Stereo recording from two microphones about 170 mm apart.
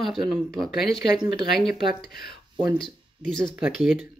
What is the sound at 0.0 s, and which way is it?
Speech, centre (ahead or behind).